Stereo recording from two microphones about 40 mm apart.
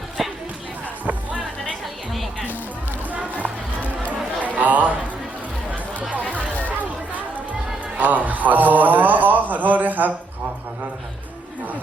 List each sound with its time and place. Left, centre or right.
0.2 s music: centre
3.1 s music: right
4.4 s a sound: right
6.0 s music: right
6.3 s chatter: right
7.9 s a sound: right